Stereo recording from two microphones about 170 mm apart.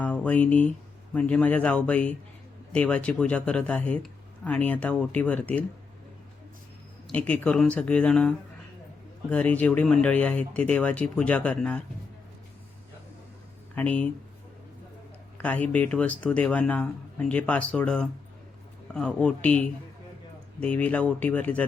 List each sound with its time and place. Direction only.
0.0 s speech: 10° left (ahead or behind)
7.1 s speech: 10° left (ahead or behind)
9.3 s speech: 5° left (ahead or behind)
13.7 s speech: 10° left (ahead or behind)
15.4 s speech: 10° left (ahead or behind)